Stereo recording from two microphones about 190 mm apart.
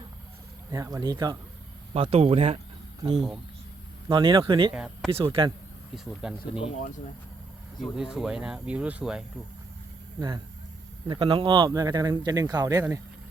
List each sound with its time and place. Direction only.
0.7 s speech: 20° right (ahead or behind)
4.1 s speech: 25° right (ahead or behind)
4.7 s speech: 5° right (ahead or behind)
5.1 s speech: 30° right (ahead or behind)
5.9 s speech: centre (ahead or behind)
7.8 s speech: 5° right (ahead or behind)
10.2 s speech: 20° right (ahead or behind)